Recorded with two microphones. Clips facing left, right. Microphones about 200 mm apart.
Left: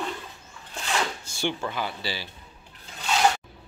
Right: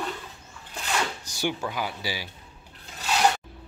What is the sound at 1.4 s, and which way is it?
Speech, 10° right (ahead or behind).